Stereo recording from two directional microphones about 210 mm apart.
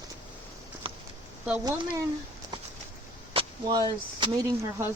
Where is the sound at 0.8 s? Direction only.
25° right (ahead or behind).